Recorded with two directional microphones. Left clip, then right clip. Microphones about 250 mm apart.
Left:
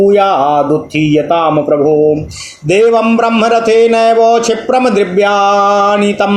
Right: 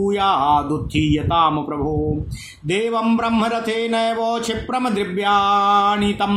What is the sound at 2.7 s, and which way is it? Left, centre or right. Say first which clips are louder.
Speech: left 11 dB; right.